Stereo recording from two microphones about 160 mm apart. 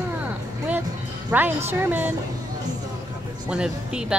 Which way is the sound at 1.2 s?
10° right (ahead or behind).